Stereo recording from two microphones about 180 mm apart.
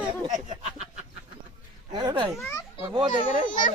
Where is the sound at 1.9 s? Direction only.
25° right (ahead or behind).